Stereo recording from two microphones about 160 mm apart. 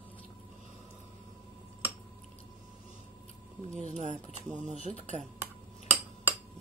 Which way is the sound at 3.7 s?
45° right (ahead or behind).